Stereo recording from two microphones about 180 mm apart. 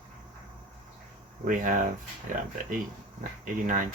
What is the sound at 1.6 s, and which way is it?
Speech, 45° right (ahead or behind).